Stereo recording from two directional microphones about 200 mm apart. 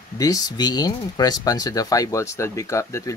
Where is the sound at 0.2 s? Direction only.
20° left (ahead or behind).